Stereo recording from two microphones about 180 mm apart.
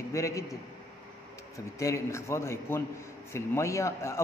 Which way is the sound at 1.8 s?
15° left (ahead or behind).